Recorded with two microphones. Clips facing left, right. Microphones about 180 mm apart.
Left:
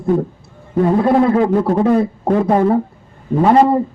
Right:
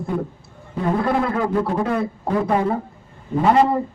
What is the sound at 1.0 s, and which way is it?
A man's voice, 30° left (ahead or behind).